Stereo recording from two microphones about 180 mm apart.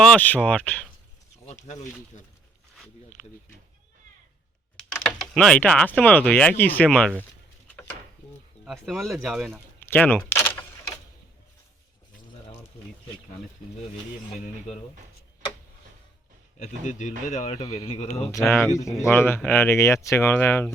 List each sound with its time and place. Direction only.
0.0 s speech: 5° left (ahead or behind)
1.6 s a man's voice: 40° left (ahead or behind)
3.2 s speech: 5° left (ahead or behind)
5.0 s speech: 5° left (ahead or behind)
8.6 s speech: centre (ahead or behind)
9.8 s door: 10° left (ahead or behind)
16.6 s a man's voice: 40° left (ahead or behind)
18.3 s speech: 15° left (ahead or behind)